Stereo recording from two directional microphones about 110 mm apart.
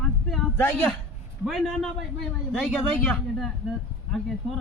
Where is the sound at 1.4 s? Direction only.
Centre (ahead or behind).